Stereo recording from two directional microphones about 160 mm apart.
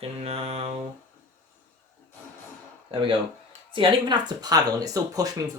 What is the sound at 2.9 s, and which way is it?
Speech, 30° right (ahead or behind).